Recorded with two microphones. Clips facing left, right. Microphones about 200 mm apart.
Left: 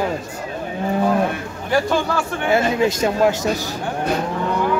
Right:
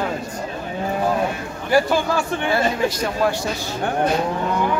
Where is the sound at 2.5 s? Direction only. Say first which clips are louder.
Left 4 dB; 25° left (ahead or behind).